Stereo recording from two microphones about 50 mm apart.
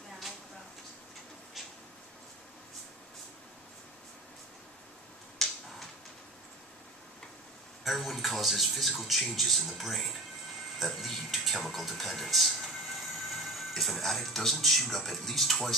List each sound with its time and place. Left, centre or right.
5.4 s tick-tock: centre
7.8 s speech: centre